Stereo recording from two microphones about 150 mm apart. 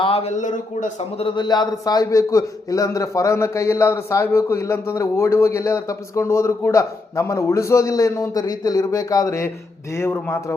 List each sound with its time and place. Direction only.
0.0 s a man's voice: 40° left (ahead or behind); by 0.9 s 55° left (ahead or behind)
1.2 s a man's voice: 30° left (ahead or behind)